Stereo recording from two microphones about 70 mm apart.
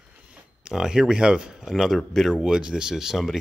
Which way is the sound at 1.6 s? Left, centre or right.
Centre.